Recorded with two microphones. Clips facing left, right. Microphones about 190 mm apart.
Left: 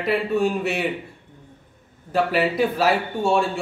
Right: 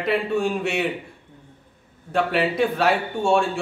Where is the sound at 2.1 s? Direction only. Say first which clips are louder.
Left 1 dB; centre (ahead or behind).